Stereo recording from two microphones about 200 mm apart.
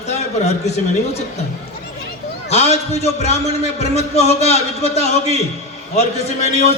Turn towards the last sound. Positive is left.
turn(degrees=35)  # may be behind; listen again after turning